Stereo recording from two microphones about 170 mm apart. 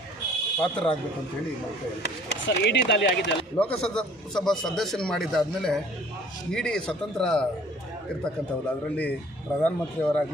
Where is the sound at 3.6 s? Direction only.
5° left (ahead or behind).